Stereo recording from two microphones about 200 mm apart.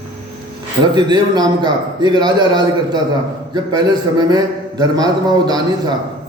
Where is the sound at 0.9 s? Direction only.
20° right (ahead or behind).